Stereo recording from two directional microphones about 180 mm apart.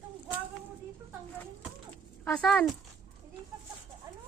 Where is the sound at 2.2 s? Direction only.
5° left (ahead or behind).